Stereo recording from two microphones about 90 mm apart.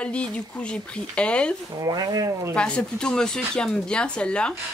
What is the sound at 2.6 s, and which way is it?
Speech, 10° left (ahead or behind).